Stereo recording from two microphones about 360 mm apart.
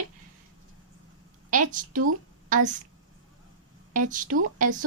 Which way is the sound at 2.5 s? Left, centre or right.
Right.